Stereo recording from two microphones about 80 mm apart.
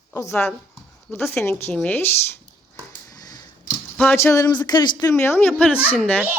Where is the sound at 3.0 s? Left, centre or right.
Left.